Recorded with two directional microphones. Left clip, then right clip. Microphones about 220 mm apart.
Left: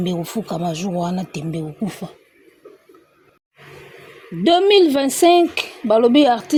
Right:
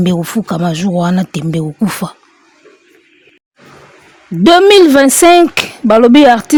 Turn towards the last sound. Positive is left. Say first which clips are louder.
# right 8 dB
turn(degrees=-50)  # may be behind; listen again after turning